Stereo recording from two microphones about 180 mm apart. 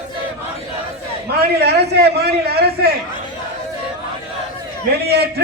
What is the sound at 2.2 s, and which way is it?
Speech, 65° right (ahead or behind).